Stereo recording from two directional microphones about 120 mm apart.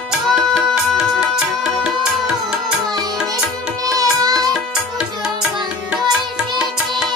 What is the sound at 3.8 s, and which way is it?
Music, 30° right (ahead or behind).